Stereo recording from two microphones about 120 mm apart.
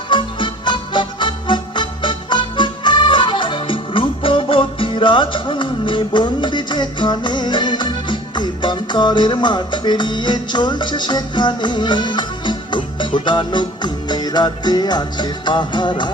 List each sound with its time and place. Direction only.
0.1 s music: 40° left (ahead or behind)